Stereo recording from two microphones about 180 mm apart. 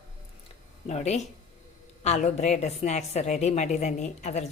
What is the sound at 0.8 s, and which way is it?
A woman's voice, 35° left (ahead or behind).